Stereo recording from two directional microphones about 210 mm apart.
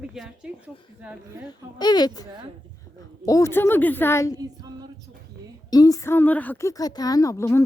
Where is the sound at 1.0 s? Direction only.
5° right (ahead or behind).